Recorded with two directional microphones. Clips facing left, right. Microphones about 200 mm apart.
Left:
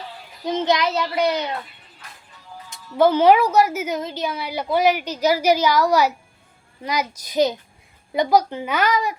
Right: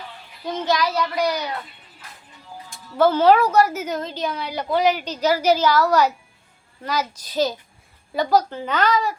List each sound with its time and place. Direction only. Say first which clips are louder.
0.4 s a child's voice: left 2 dB; 20° left (ahead or behind)
2.6 s a woman's voice: left 1 dB; 15° left (ahead or behind)